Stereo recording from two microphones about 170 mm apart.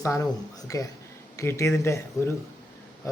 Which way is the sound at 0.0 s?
20° left (ahead or behind).